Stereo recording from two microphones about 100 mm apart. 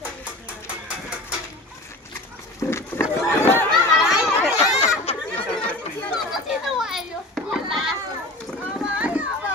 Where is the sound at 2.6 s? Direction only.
25° left (ahead or behind).